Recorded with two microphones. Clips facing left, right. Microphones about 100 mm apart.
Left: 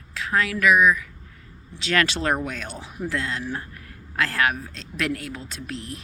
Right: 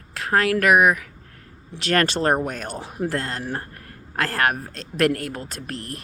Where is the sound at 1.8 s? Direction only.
50° right (ahead or behind).